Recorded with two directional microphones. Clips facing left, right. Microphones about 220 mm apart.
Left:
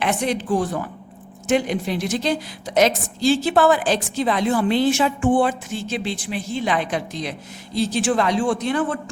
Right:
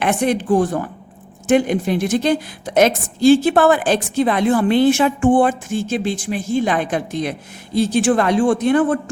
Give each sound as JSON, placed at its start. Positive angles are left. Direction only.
{"t": 0.0, "sound": "a woman's voice", "side_deg": -55}